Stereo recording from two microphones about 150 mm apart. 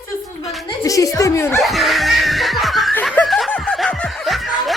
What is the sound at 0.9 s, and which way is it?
Speech, 20° left (ahead or behind).